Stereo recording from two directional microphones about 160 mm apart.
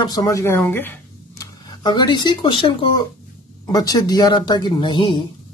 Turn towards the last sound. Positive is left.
turn(degrees=30)  # may be behind; listen again after turning